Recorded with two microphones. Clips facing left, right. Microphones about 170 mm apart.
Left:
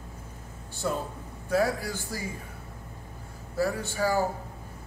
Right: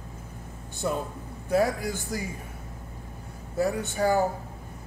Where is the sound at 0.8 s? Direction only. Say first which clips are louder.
Right 1 dB; 15° right (ahead or behind).